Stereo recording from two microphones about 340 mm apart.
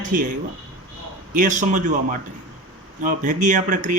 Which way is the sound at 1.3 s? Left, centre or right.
Right.